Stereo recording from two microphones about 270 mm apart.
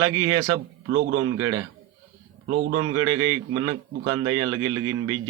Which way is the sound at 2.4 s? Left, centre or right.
Right.